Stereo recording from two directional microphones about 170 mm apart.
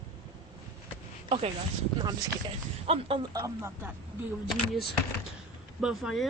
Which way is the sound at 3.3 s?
20° right (ahead or behind).